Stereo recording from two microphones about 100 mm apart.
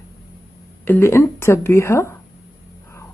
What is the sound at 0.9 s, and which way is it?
Speech, 25° left (ahead or behind).